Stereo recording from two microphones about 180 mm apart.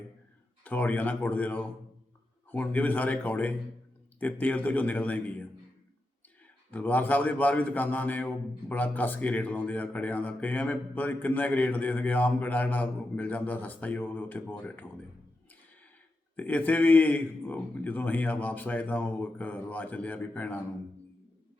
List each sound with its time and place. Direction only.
0.6 s speech: 10° left (ahead or behind)
6.7 s speech: 10° left (ahead or behind)
16.3 s speech: 10° left (ahead or behind)